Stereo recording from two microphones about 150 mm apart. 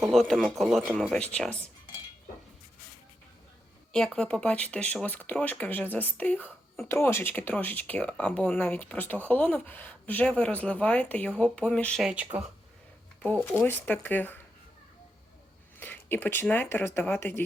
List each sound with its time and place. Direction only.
0.0 s a man's voice: centre (ahead or behind)
3.9 s speech: 5° left (ahead or behind)
12.0 s speech: 10° right (ahead or behind)
13.2 s speech: 10° left (ahead or behind)
15.8 s speech: 15° left (ahead or behind)